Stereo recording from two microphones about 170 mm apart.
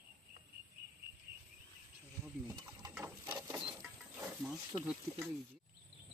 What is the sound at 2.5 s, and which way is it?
Mechanisms, 20° right (ahead or behind).